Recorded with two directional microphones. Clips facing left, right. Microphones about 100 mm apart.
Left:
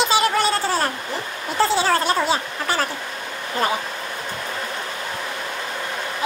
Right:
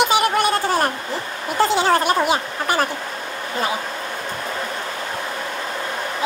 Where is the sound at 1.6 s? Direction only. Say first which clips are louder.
Right 2 dB; 20° right (ahead or behind).